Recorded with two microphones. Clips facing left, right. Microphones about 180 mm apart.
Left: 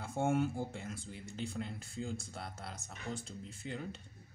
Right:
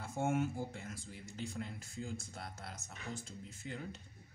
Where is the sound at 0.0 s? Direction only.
30° left (ahead or behind).